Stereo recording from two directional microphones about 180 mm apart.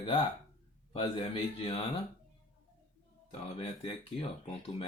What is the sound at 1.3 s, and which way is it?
Speech, 30° left (ahead or behind).